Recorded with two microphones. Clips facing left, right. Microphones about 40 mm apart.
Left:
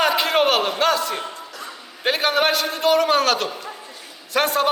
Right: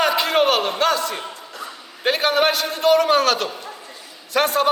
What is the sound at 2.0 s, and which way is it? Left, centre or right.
A man's voice, centre.